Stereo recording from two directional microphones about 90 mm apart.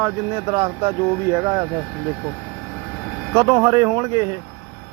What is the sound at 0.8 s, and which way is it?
Speech, 40° right (ahead or behind).